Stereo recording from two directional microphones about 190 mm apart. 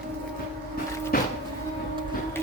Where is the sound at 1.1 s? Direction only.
50° left (ahead or behind).